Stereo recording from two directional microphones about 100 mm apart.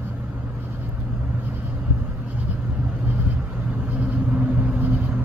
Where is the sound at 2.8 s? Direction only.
15° right (ahead or behind).